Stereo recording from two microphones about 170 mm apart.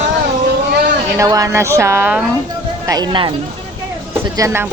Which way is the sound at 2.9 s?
25° right (ahead or behind).